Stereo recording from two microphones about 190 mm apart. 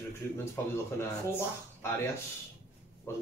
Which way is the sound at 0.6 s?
15° left (ahead or behind).